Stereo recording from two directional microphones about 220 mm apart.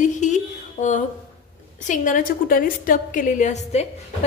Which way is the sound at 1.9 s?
35° left (ahead or behind).